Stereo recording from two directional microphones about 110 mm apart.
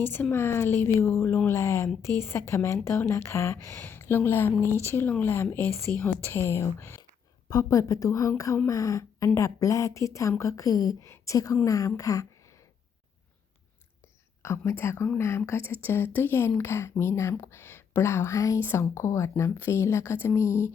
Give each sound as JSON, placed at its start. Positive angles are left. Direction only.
{"t": 0.0, "sound": "speech", "side_deg": 20}
{"t": 7.5, "sound": "a woman's voice", "side_deg": 30}
{"t": 14.4, "sound": "speech", "side_deg": 25}